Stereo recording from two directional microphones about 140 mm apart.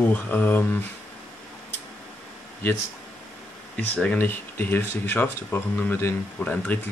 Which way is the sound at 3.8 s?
10° left (ahead or behind).